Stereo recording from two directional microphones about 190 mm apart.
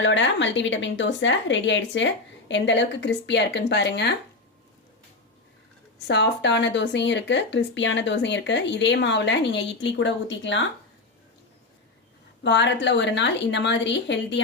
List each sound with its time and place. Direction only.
0.0 s speech: 75° left (ahead or behind)
6.1 s speech: 65° left (ahead or behind)
12.4 s speech: 65° left (ahead or behind)